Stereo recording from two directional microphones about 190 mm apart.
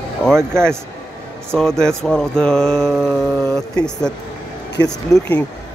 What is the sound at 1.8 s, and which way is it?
Mantra, 5° left (ahead or behind).